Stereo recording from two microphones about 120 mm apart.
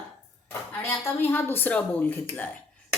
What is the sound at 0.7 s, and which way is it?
Speech, 20° left (ahead or behind).